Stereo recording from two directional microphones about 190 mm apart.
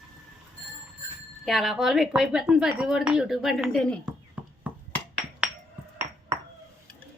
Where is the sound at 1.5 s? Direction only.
Centre (ahead or behind).